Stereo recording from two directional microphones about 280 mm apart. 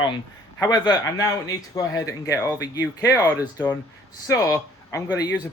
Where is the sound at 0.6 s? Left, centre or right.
Centre.